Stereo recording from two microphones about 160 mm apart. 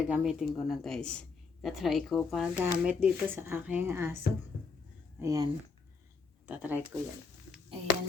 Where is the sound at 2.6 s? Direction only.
10° right (ahead or behind).